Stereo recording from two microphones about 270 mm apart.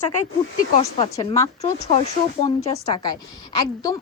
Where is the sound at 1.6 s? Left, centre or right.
Left.